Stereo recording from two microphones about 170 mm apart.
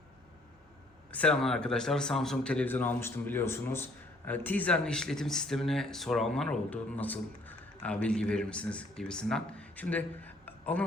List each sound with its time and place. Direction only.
1.1 s speech: 5° left (ahead or behind)